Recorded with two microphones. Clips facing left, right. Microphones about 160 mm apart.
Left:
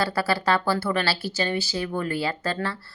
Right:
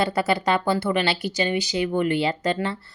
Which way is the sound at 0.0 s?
20° right (ahead or behind).